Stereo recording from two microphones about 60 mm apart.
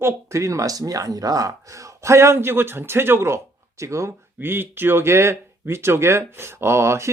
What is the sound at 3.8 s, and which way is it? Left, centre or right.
Speech, right.